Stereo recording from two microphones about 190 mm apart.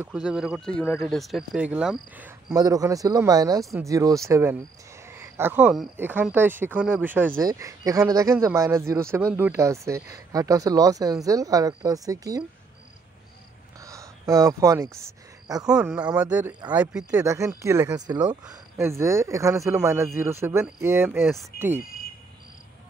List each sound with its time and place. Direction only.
0.0 s speech: 5° right (ahead or behind)
2.5 s speech: 20° right (ahead or behind)
13.7 s a sound: 15° right (ahead or behind)
15.4 s speech: 20° right (ahead or behind)
15.7 s speech: 5° right (ahead or behind)